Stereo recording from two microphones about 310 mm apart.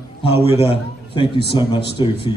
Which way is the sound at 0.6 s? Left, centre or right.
Centre.